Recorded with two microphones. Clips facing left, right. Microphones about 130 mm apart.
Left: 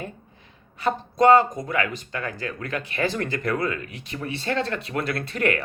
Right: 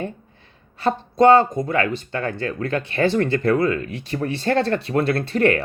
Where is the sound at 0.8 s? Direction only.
30° right (ahead or behind).